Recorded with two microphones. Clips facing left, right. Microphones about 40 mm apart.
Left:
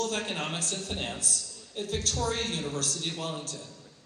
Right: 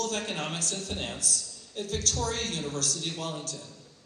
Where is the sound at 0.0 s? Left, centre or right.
Left.